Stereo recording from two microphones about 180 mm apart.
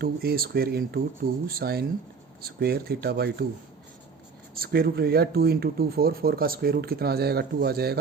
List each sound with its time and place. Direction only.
0.0 s speech: 60° right (ahead or behind)
4.5 s speech: 55° right (ahead or behind)